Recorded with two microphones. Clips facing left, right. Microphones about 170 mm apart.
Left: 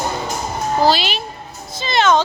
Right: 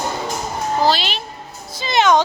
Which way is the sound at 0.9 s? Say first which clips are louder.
Left 2 dB; 5° left (ahead or behind).